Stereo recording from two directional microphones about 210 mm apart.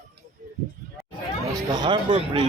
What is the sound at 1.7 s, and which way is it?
Speech, 20° right (ahead or behind).